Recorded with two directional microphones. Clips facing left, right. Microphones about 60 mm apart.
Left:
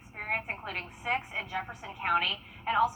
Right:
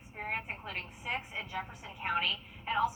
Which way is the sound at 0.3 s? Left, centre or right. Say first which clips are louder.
Left 4 dB; left.